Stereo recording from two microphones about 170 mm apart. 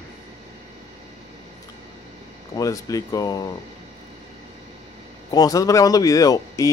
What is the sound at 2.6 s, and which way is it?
Speech, 20° left (ahead or behind).